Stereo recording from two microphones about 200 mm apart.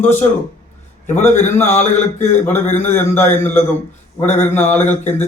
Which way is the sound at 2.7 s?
35° left (ahead or behind).